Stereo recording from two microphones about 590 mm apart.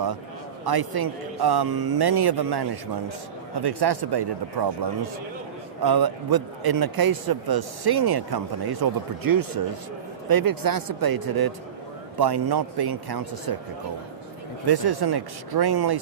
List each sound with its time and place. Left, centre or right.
0.6 s a man's voice: right
14.7 s a man's voice: right